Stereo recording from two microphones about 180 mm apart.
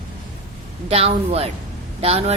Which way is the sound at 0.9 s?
35° right (ahead or behind).